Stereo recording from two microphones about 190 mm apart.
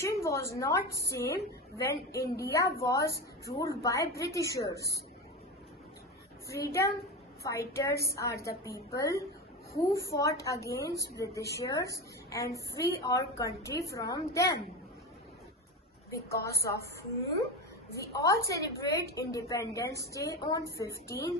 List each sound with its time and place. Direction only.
0.2 s a woman's voice: 15° left (ahead or behind)
6.5 s a woman's voice: 15° left (ahead or behind)
16.1 s a woman's voice: 15° left (ahead or behind)
17.9 s a woman's voice: 15° left (ahead or behind)